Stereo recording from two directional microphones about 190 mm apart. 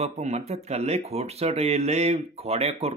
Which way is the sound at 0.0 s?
35° right (ahead or behind).